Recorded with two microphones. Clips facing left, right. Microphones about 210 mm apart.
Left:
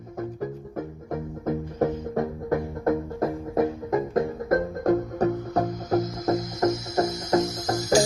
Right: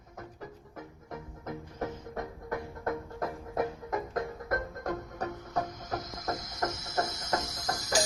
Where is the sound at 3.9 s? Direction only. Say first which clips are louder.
Left 10 dB; 30° left (ahead or behind).